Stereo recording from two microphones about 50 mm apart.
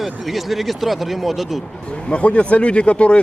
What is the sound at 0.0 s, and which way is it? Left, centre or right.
Speech, centre.